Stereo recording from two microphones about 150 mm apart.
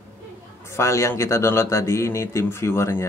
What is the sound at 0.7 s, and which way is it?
Speech, 20° left (ahead or behind).